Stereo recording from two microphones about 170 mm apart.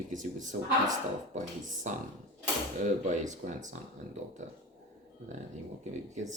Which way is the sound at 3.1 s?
45° right (ahead or behind).